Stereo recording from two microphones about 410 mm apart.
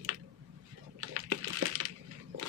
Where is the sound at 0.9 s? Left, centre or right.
Right.